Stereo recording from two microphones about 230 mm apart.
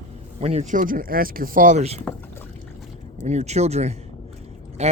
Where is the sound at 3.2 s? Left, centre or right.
Right.